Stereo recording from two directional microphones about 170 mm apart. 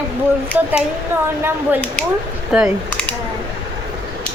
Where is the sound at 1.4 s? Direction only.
10° right (ahead or behind).